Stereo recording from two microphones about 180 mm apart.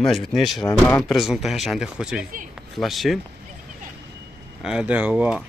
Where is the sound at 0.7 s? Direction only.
20° left (ahead or behind).